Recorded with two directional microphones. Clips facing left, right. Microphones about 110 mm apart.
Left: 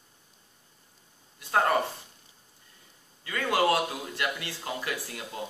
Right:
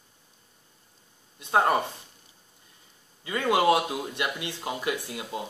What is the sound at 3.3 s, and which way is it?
Speech, 20° right (ahead or behind).